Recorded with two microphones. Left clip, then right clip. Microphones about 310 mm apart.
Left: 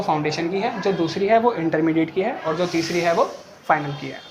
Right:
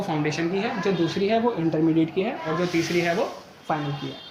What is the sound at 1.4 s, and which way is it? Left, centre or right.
Speech, left.